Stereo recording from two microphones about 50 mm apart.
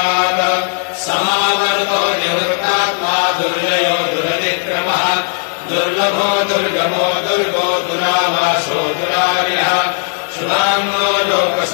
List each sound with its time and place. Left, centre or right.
0.0 s mantra: right
1.1 s chant: centre
4.7 s mantra: right
5.9 s a sound: right
8.1 s mantra: right
10.5 s chant: right